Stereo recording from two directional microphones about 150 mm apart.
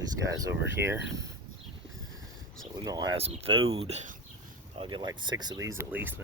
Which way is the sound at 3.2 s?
40° right (ahead or behind).